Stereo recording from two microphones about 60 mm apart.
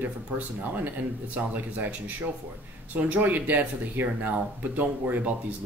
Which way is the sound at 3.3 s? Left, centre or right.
Right.